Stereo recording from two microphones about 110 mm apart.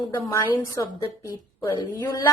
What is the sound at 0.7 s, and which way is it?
A woman's voice, 30° left (ahead or behind).